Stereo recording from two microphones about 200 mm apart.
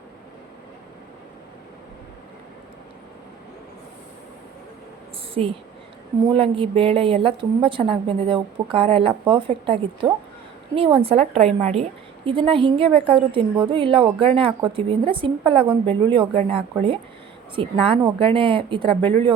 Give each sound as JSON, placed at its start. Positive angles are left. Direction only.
{"t": 5.3, "sound": "a woman's voice", "side_deg": -25}